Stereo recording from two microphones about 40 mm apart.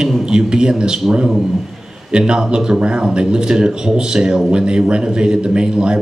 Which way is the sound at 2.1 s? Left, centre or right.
Right.